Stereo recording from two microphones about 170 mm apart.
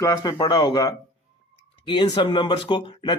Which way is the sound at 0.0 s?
20° left (ahead or behind).